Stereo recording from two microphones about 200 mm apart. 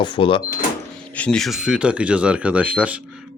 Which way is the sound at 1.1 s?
5° left (ahead or behind).